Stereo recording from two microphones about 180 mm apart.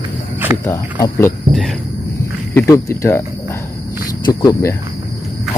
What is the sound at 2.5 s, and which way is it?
Speech, 15° left (ahead or behind).